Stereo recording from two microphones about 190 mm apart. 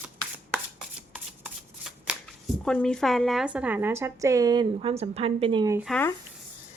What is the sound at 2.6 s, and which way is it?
A woman's voice, 5° left (ahead or behind).